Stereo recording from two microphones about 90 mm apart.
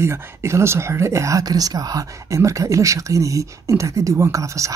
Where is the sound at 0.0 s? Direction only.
30° right (ahead or behind).